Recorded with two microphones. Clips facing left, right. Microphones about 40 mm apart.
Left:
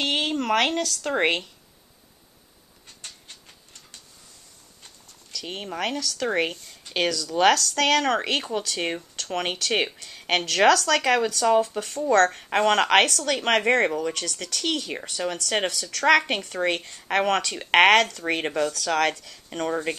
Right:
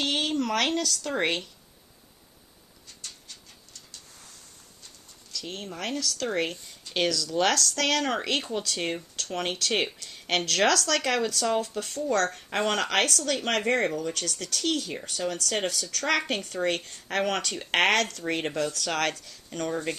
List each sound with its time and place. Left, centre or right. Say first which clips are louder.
0.0 s a sound: left 2 dB; left
1.1 s speech: left 5 dB; left
5.5 s speech: left 5 dB; left